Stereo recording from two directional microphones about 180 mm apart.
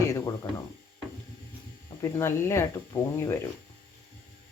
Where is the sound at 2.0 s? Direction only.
15° left (ahead or behind).